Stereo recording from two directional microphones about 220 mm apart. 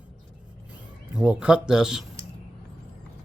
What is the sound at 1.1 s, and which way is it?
Speech, 5° right (ahead or behind).